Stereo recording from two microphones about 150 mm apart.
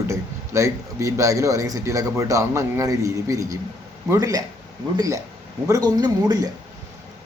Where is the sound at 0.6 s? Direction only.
20° right (ahead or behind).